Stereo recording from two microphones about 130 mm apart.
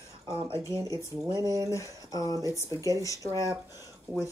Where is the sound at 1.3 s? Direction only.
25° right (ahead or behind).